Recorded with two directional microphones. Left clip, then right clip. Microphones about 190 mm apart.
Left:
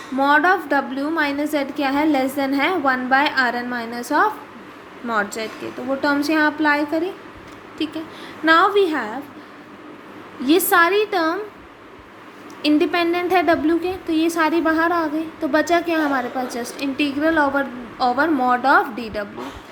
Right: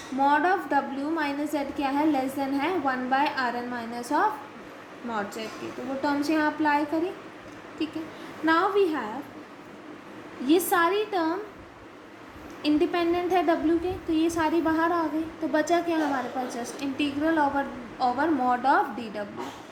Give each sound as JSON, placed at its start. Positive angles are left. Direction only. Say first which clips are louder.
{"t": 0.2, "sound": "a woman's voice", "louder": "left 7 dB", "side_deg": 30}
{"t": 10.4, "sound": "a woman's voice", "louder": "left 7 dB", "side_deg": 35}
{"t": 12.6, "sound": "a woman's voice", "louder": "left 6 dB", "side_deg": 35}